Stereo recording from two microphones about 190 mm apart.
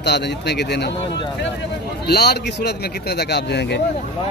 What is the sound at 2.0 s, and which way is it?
Speech, 60° left (ahead or behind).